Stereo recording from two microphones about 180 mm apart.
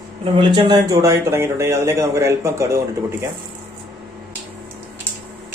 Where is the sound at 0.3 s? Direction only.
25° right (ahead or behind).